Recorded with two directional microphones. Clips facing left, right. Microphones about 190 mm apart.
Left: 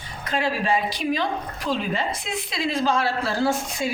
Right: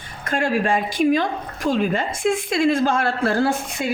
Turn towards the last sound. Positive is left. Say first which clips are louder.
# right 2 dB
turn(degrees=-55)  # may be behind; listen again after turning